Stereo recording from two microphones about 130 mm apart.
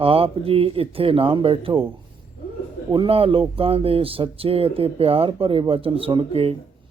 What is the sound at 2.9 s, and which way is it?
Speech, 45° right (ahead or behind).